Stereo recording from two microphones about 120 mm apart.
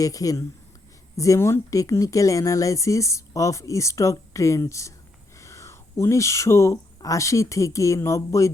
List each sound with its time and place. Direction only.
0.0 s speech: 30° left (ahead or behind)